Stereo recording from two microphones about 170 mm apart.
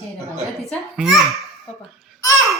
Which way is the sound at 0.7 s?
Centre (ahead or behind).